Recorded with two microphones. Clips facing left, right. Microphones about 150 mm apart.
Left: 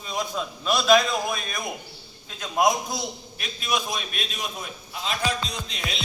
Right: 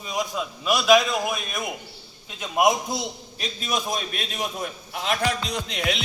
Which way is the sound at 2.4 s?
20° right (ahead or behind).